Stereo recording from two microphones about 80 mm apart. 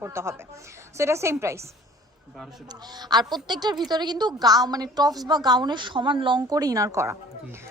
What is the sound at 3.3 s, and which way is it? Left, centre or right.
A woman's voice, right.